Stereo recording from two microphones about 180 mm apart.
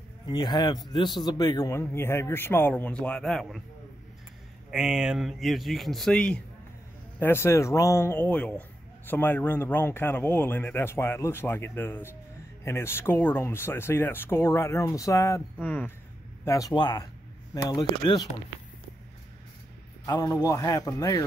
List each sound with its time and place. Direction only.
0.3 s a man's voice: 25° left (ahead or behind); by 3.6 s centre (ahead or behind)
4.6 s speech: 5° right (ahead or behind)
16.4 s a man's voice: 20° left (ahead or behind)
20.1 s a man's voice: 20° left (ahead or behind)